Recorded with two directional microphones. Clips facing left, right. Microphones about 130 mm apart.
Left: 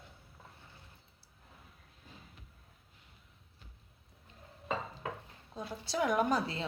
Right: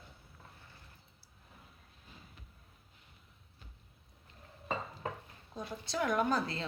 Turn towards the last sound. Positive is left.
turn(degrees=10)  # may be behind; listen again after turning